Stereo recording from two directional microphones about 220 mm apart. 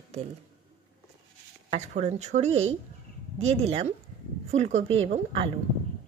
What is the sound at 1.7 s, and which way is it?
A woman's voice, 30° right (ahead or behind).